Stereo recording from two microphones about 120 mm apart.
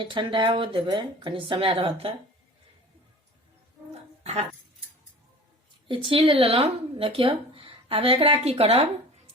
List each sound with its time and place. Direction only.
0.0 s speech: 45° right (ahead or behind)
4.2 s a sound: 60° right (ahead or behind)
5.9 s speech: 45° right (ahead or behind)